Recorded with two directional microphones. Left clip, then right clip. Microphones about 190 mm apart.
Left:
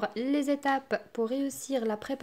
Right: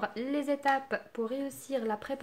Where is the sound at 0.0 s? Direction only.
50° left (ahead or behind).